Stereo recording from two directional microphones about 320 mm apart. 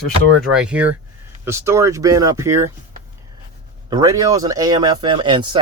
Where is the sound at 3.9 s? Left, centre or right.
Centre.